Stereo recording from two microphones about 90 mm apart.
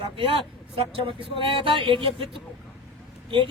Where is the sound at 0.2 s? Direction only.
90° right.